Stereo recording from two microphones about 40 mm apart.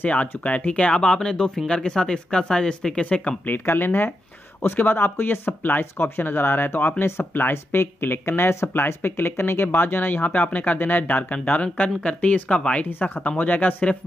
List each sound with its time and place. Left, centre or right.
0.1 s speech: left
0.9 s speech: centre
3.4 s speech: left
7.1 s speech: left
9.8 s speech: left
10.3 s speech: left
10.8 s speech: left
12.4 s speech: left
13.4 s speech: left